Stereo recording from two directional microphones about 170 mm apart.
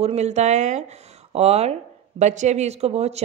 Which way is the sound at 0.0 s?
40° right (ahead or behind).